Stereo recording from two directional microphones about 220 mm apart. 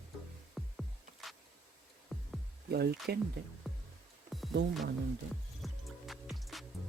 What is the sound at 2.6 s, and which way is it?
Speech, 45° right (ahead or behind).